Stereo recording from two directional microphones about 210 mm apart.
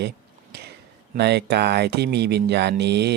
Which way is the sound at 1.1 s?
50° right (ahead or behind).